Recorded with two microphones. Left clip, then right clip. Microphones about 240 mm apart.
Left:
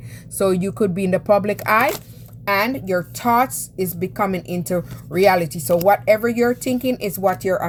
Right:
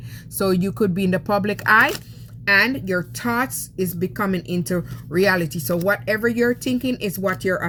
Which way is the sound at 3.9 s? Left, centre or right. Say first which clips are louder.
Left 4 dB; left.